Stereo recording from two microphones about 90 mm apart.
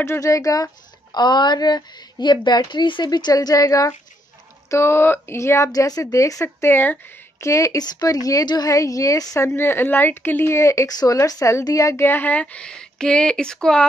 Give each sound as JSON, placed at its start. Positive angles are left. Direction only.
{"t": 0.0, "sound": "a woman's voice", "side_deg": 30}
{"t": 1.1, "sound": "speech", "side_deg": 55}
{"t": 4.6, "sound": "speech", "side_deg": 30}
{"t": 5.7, "sound": "a woman's voice", "side_deg": 45}
{"t": 7.3, "sound": "a woman's voice", "side_deg": 35}
{"t": 12.1, "sound": "speech", "side_deg": 20}